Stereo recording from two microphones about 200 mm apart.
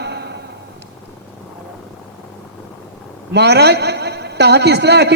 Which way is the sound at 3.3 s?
55° right (ahead or behind).